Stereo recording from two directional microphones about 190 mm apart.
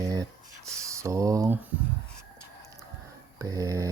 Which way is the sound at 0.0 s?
20° right (ahead or behind).